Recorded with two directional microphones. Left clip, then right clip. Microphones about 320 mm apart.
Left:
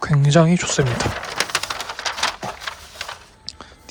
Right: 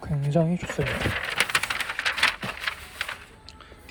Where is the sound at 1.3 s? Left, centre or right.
Left.